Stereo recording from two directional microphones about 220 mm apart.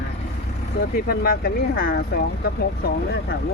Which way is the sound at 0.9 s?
45° left (ahead or behind).